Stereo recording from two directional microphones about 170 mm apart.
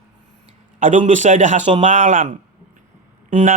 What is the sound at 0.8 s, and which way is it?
A man's voice, 45° right (ahead or behind).